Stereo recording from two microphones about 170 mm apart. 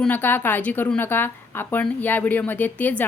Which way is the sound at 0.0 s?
10° left (ahead or behind).